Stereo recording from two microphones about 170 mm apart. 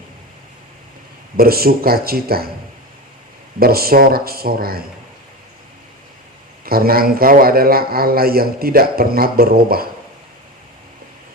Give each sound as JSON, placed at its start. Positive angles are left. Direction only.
{"t": 1.4, "sound": "speech", "side_deg": -60}
{"t": 3.6, "sound": "speech", "side_deg": -60}
{"t": 6.7, "sound": "speech", "side_deg": -60}